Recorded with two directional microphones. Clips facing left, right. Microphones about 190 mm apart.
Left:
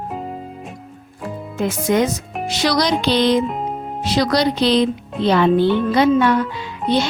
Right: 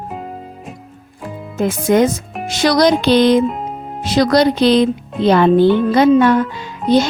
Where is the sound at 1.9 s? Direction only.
50° right (ahead or behind).